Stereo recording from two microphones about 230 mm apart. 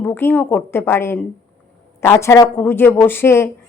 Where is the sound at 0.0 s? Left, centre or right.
Centre.